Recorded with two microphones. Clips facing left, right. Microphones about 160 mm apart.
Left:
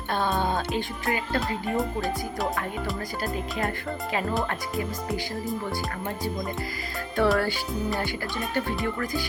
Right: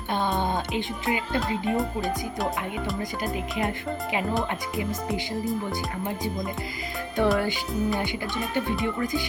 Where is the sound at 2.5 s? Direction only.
20° right (ahead or behind).